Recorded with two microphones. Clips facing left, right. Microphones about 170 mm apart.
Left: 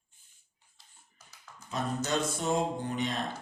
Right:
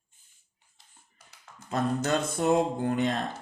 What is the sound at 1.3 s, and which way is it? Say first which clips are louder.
Mantra: right 7 dB; 60° right (ahead or behind).